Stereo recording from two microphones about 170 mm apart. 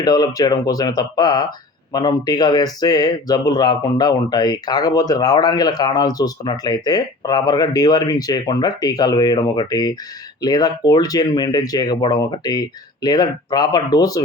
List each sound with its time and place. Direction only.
0.0 s speech: 25° left (ahead or behind)